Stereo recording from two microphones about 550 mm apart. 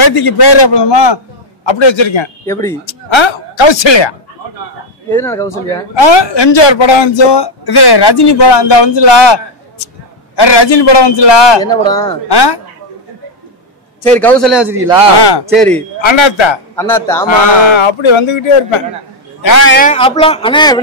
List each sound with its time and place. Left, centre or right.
0.0 s speech: left
2.4 s a man's voice: centre
2.9 s speech: left
5.1 s a man's voice: centre
5.9 s speech: left
11.6 s a man's voice: centre
12.3 s speech: left
14.0 s a man's voice: centre
16.0 s speech: left
16.7 s a man's voice: centre
17.6 s speech: left
19.6 s a man's voice: centre